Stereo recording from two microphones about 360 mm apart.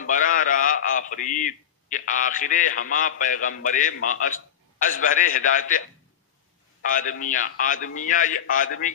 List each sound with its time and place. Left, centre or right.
0.0 s a man's voice: left
6.9 s a man's voice: left